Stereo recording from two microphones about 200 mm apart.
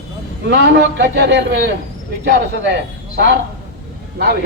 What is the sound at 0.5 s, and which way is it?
Speech, 55° right (ahead or behind).